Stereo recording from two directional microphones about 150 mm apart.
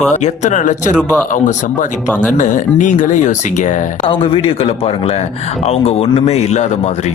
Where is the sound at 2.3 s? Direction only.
55° left (ahead or behind).